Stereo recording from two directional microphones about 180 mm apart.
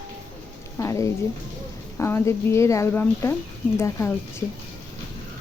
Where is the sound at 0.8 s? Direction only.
15° left (ahead or behind).